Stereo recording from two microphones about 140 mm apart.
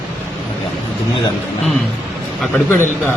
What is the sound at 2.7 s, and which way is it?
Speech, 15° left (ahead or behind).